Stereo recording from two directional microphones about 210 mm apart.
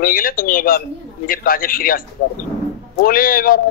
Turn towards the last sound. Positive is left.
turn(degrees=45)  # may be behind; listen again after turning